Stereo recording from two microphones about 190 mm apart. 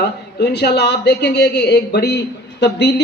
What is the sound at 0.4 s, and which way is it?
A man's voice, 60° left (ahead or behind).